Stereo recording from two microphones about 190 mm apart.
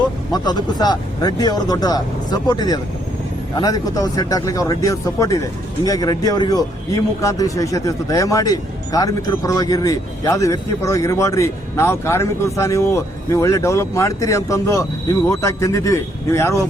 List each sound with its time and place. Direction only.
0.3 s speech: 20° left (ahead or behind)